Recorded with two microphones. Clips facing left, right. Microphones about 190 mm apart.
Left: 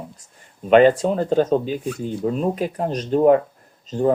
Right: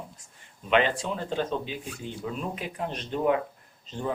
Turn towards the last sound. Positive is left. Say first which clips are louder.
# left 13 dB
turn(degrees=40)  # may be behind; listen again after turning